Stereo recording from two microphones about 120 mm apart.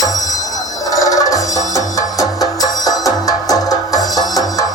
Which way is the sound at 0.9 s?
30° left (ahead or behind).